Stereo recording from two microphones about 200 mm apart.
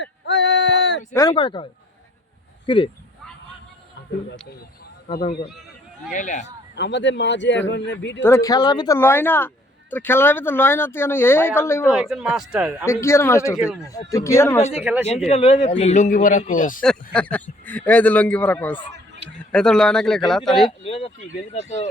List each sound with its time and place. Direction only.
0.0 s male singing: 60° left (ahead or behind)
1.3 s speech: 25° left (ahead or behind)
2.6 s speech: 25° left (ahead or behind)
6.1 s a man's voice: 40° left (ahead or behind)
6.7 s speech: 60° left (ahead or behind)
8.2 s a man's voice: 15° left (ahead or behind)
11.9 s speech: 5° right (ahead or behind)
12.8 s a man's voice: 15° left (ahead or behind)
15.3 s a man's voice: 30° left (ahead or behind)
16.8 s a man's voice: 5° left (ahead or behind)
20.8 s a man's voice: 30° left (ahead or behind)